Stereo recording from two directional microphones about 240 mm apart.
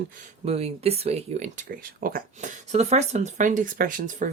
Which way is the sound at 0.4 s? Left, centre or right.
Right.